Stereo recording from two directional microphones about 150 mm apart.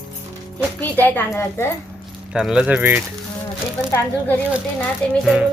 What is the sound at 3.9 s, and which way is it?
A woman's voice, 15° left (ahead or behind).